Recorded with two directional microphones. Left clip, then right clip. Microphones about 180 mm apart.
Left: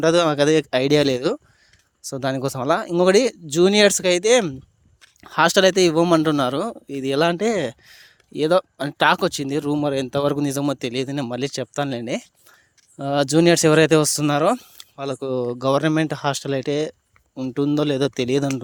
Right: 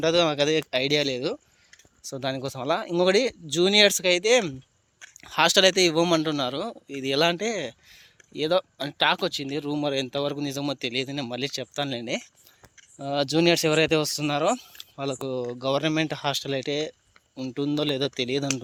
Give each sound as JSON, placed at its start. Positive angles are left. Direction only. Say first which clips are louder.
{"t": 0.0, "sound": "speech", "louder": "left 5 dB", "side_deg": 55}
{"t": 2.0, "sound": "a man's voice", "louder": "left 6 dB", "side_deg": 45}